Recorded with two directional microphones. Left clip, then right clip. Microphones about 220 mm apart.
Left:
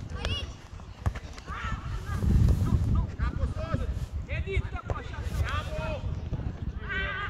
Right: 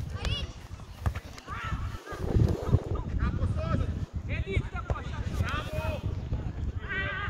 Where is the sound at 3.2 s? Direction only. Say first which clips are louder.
Right 3 dB; 15° left (ahead or behind).